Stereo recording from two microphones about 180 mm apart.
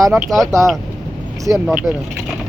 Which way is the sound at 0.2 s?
Centre (ahead or behind).